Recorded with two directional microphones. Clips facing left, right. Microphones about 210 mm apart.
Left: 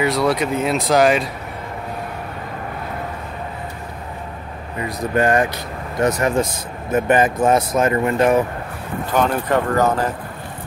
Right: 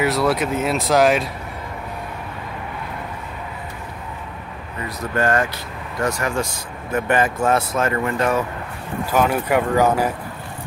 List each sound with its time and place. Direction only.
0.0 s speech: centre (ahead or behind)
4.8 s speech: 15° left (ahead or behind)
9.1 s speech: 10° right (ahead or behind)